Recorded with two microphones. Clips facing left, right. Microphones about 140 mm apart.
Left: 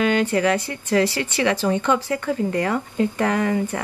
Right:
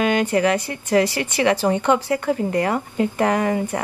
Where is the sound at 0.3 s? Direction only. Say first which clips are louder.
Right 2 dB; 30° right (ahead or behind).